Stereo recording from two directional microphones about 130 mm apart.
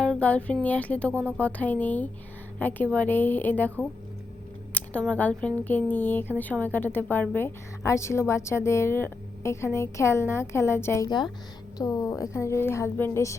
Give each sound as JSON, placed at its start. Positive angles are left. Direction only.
{"t": 0.0, "sound": "a woman's voice", "side_deg": 10}